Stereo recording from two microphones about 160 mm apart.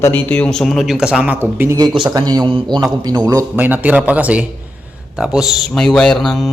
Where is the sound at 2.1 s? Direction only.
25° right (ahead or behind).